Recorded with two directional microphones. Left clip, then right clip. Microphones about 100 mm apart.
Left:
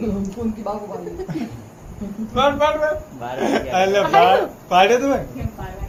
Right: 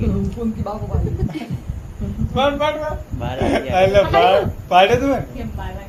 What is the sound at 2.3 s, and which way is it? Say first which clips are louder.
Speech: left 1 dB; 25° right (ahead or behind).